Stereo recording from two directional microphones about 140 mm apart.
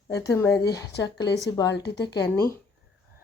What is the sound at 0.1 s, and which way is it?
A woman's voice, 20° left (ahead or behind).